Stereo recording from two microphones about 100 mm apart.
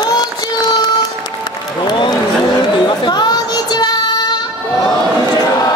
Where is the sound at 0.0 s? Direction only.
45° left (ahead or behind).